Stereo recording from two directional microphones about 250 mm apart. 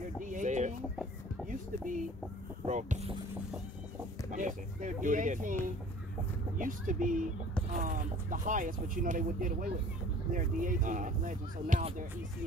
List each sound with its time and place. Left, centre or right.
0.2 s chicken: right
2.6 s speech: right
4.3 s a sound: right
6.6 s speech: right